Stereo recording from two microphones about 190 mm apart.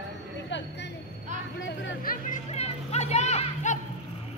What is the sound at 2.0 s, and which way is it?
Music, 50° left (ahead or behind).